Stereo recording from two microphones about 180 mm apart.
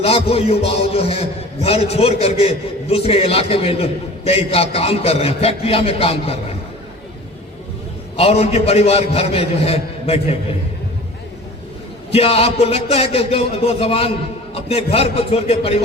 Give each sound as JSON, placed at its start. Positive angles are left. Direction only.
{"t": 0.0, "sound": "a man's voice", "side_deg": 35}
{"t": 8.1, "sound": "a man's voice", "side_deg": 35}
{"t": 12.1, "sound": "a man's voice", "side_deg": 35}